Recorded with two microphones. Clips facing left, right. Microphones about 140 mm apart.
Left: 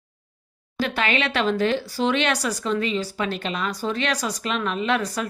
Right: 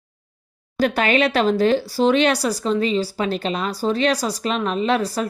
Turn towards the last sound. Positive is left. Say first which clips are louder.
# right 4 dB
turn(degrees=-35)  # may be behind; listen again after turning